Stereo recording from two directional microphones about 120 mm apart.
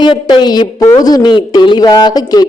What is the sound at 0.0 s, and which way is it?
A woman's voice, 40° left (ahead or behind).